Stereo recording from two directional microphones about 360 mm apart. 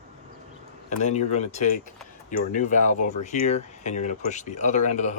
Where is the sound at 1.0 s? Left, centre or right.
Centre.